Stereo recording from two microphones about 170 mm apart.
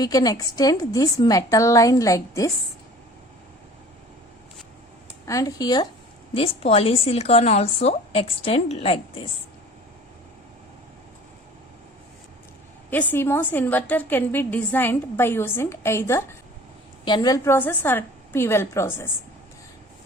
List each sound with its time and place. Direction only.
0.0 s a woman's voice: 20° left (ahead or behind)
5.2 s a woman's voice: 20° left (ahead or behind)
6.3 s a woman's voice: 35° left (ahead or behind)
12.9 s a woman's voice: 10° left (ahead or behind)